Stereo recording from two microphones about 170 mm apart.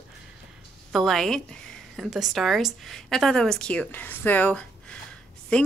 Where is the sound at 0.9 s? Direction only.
Centre (ahead or behind).